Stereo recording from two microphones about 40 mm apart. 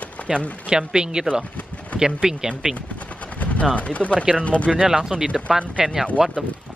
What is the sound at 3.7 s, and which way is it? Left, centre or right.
Speech, left.